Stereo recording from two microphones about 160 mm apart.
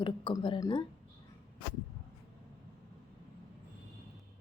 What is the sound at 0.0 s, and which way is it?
Speech, 30° left (ahead or behind).